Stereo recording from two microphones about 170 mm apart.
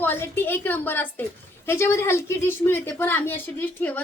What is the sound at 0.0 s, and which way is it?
A woman's voice, 15° left (ahead or behind).